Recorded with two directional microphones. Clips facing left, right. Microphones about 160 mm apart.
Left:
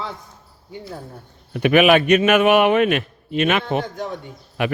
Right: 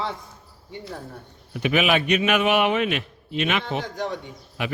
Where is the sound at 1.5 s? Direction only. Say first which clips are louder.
Left 7 dB; 60° left (ahead or behind).